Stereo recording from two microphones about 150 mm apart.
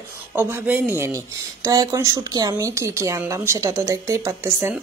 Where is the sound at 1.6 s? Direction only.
25° right (ahead or behind).